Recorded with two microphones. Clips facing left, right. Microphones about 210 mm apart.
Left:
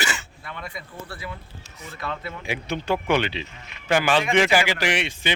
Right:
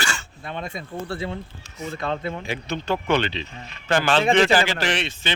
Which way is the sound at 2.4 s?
10° left (ahead or behind).